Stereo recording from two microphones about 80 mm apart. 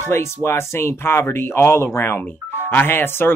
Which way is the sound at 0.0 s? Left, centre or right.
Left.